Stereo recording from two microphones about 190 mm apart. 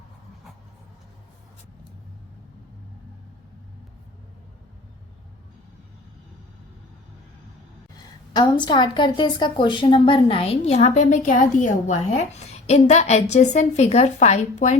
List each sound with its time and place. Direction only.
7.9 s a woman's voice: 20° left (ahead or behind); by 14.8 s 40° left (ahead or behind)